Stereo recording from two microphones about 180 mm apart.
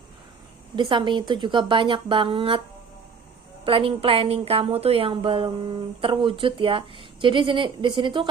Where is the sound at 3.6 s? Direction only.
30° right (ahead or behind).